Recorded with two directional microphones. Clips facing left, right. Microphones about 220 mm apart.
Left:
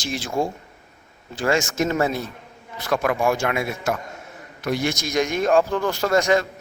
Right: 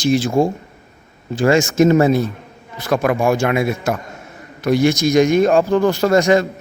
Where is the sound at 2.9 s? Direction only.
35° right (ahead or behind).